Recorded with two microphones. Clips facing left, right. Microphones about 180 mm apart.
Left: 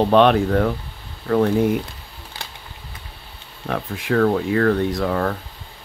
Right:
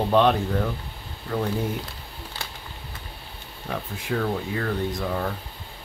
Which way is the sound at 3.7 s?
70° left (ahead or behind).